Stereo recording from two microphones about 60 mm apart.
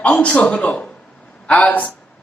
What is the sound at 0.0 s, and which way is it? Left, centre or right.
A man's voice, centre.